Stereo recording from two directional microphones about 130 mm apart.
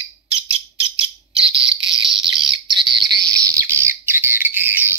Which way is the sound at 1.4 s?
45° right (ahead or behind).